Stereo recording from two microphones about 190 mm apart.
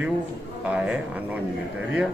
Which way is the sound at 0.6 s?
5° right (ahead or behind).